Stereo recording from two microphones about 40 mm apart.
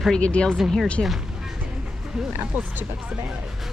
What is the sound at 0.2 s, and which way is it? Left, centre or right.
Speech, left.